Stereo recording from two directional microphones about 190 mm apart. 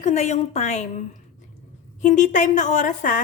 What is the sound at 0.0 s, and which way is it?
Speech, 35° left (ahead or behind).